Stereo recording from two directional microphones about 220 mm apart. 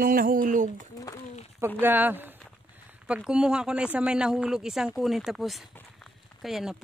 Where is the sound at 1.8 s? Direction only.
10° right (ahead or behind).